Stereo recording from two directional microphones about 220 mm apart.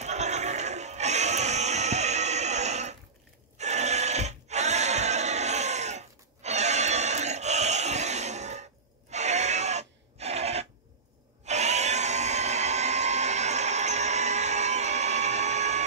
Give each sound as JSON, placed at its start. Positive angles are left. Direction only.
{"t": 0.0, "sound": "music", "side_deg": -30}
{"t": 3.5, "sound": "a sound", "side_deg": -30}
{"t": 11.4, "sound": "vacuum cleaner", "side_deg": -30}